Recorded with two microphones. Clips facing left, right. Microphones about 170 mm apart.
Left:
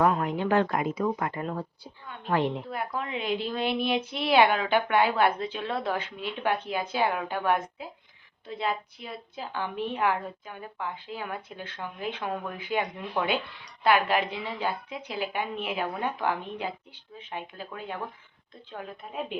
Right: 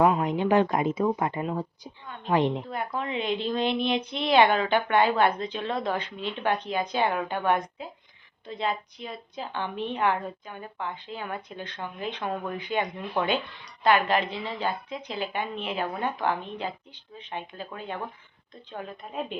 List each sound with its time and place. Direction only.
0.0 s a woman's voice: 15° right (ahead or behind)
2.6 s a woman's voice: 5° left (ahead or behind)